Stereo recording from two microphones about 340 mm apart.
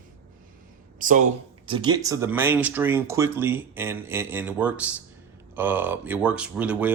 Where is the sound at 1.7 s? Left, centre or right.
Centre.